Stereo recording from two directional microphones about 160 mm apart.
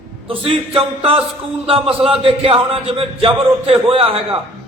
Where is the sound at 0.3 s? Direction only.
35° right (ahead or behind).